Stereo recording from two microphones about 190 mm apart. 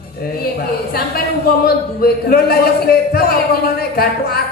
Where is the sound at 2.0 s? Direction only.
55° left (ahead or behind).